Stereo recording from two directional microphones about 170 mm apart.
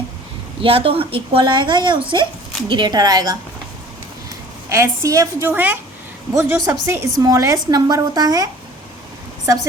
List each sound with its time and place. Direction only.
0.6 s a woman's voice: 35° right (ahead or behind)
4.7 s a woman's voice: 20° right (ahead or behind)